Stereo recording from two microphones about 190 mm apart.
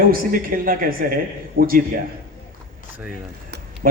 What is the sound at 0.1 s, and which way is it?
A man's voice, 50° right (ahead or behind).